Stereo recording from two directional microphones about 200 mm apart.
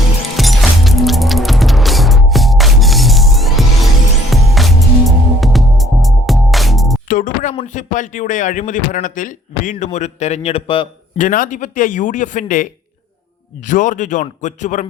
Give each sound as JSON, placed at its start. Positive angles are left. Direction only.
{"t": 0.3, "sound": "music", "side_deg": 0}
{"t": 7.1, "sound": "music", "side_deg": 40}
{"t": 7.5, "sound": "speech", "side_deg": 35}
{"t": 11.2, "sound": "speech", "side_deg": 40}
{"t": 13.7, "sound": "speech", "side_deg": 40}